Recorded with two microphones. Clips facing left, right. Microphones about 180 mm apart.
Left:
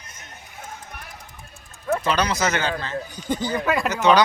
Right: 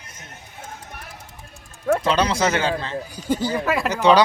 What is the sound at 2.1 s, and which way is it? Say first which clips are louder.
Speech: right 2 dB; 30° right (ahead or behind).